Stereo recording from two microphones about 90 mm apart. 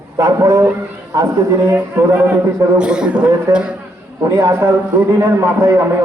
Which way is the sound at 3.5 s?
35° right (ahead or behind).